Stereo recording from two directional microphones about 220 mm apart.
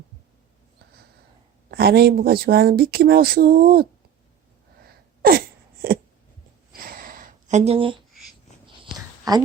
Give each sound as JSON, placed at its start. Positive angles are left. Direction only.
{"t": 1.7, "sound": "speech", "side_deg": -45}
{"t": 4.8, "sound": "sneeze", "side_deg": -40}
{"t": 6.7, "sound": "a sound", "side_deg": -40}